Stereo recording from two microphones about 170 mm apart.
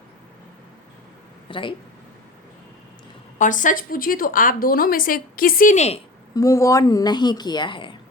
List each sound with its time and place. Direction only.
1.5 s speech: 30° left (ahead or behind)
3.3 s a woman's voice: 50° left (ahead or behind)
6.3 s speech: 20° left (ahead or behind)